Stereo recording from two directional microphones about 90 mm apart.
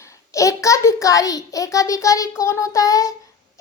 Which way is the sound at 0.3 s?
35° left (ahead or behind).